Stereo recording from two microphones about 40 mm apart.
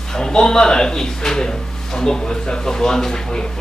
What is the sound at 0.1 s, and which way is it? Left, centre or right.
Speech, centre.